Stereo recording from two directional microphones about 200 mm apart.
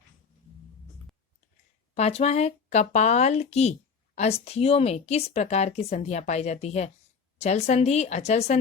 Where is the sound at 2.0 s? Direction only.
30° left (ahead or behind).